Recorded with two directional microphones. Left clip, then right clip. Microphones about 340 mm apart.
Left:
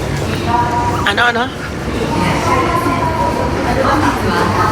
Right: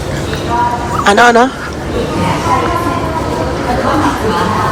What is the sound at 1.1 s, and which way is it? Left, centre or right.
Speech, right.